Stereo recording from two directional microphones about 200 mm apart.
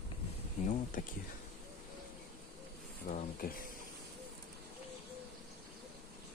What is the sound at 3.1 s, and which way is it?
Speech, 45° left (ahead or behind).